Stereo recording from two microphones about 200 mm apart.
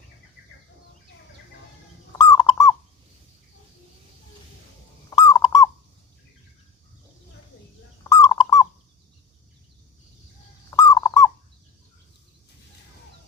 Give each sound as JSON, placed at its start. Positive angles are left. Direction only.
{"t": 2.1, "sound": "bird", "side_deg": 15}
{"t": 5.1, "sound": "bird", "side_deg": 15}
{"t": 8.1, "sound": "bird", "side_deg": 15}
{"t": 10.7, "sound": "fowl", "side_deg": 15}